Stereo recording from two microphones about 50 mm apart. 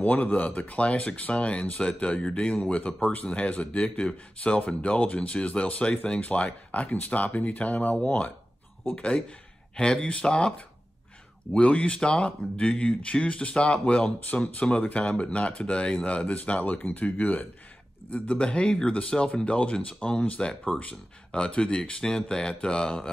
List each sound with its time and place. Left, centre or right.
0.0 s speech: left
11.5 s speech: left
14.8 s speech: left
16.8 s speech: left; by 23.1 s centre